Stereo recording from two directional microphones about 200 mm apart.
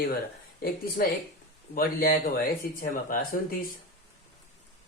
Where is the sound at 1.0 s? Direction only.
50° left (ahead or behind).